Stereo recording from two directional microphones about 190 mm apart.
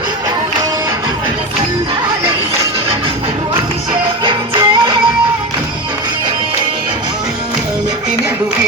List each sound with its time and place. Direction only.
4.2 s music: 25° right (ahead or behind)